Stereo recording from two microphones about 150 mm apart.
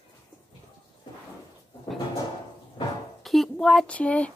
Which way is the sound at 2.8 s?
35° left (ahead or behind).